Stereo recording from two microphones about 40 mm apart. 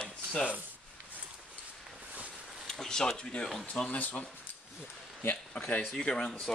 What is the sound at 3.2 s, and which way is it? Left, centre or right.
Speech, left.